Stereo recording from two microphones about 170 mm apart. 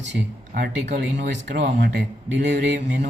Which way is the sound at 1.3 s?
75° right (ahead or behind).